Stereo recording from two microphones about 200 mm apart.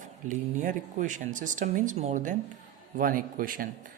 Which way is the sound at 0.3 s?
40° right (ahead or behind).